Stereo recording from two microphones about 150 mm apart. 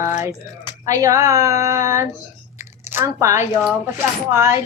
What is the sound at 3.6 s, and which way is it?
Speech, 20° right (ahead or behind).